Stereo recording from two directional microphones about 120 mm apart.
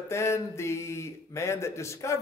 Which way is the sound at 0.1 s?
20° left (ahead or behind).